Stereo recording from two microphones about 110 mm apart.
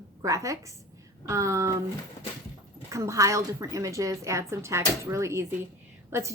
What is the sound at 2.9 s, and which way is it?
A woman's voice, 30° right (ahead or behind).